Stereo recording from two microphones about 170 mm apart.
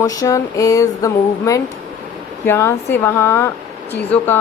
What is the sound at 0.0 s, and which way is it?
A woman's voice, 20° left (ahead or behind).